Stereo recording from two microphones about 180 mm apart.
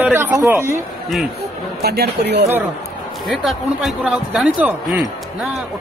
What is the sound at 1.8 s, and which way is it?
Speech, 65° right (ahead or behind).